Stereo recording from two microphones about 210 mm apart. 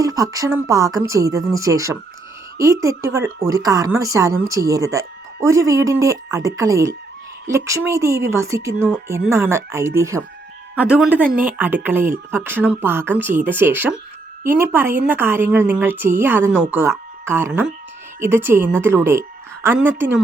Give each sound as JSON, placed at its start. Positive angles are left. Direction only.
{"t": 0.0, "sound": "speech", "side_deg": -15}